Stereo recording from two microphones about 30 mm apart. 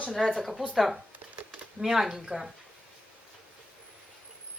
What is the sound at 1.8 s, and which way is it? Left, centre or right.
Speech, centre.